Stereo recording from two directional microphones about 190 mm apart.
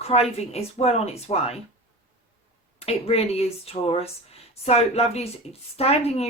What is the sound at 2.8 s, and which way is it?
A woman's voice, 35° left (ahead or behind).